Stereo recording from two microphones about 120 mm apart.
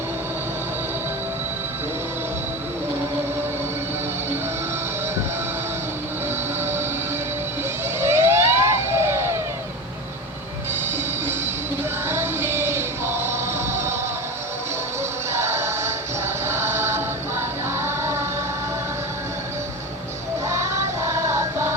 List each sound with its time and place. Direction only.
6.6 s train: 20° right (ahead or behind)
7.9 s emergency vehicle: 20° right (ahead or behind)
10.9 s music: 20° right (ahead or behind)
15.3 s music: 20° right (ahead or behind)
20.5 s music: 25° right (ahead or behind)